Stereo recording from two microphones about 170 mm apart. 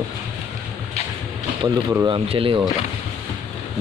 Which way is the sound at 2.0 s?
30° right (ahead or behind).